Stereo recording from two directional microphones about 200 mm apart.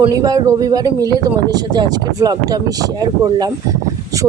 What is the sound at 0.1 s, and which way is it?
Speech, 20° right (ahead or behind).